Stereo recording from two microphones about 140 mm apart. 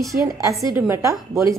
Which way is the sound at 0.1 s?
20° right (ahead or behind).